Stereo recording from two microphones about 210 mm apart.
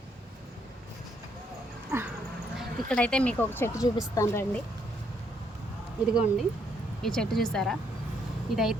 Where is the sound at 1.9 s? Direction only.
10° right (ahead or behind).